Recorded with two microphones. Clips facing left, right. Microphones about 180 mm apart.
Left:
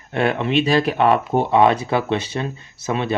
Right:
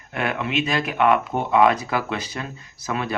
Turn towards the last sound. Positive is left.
turn(degrees=25)  # may be behind; listen again after turning